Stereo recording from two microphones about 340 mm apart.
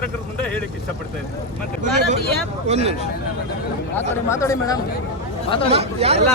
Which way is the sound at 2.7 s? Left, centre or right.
Centre.